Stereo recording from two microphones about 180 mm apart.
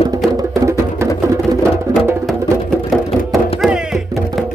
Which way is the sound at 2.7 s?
Centre (ahead or behind).